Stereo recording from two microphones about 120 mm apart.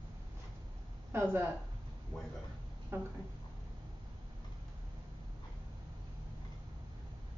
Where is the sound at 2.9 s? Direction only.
15° right (ahead or behind).